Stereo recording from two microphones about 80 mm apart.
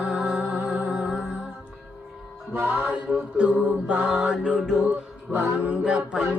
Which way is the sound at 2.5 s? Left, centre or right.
Right.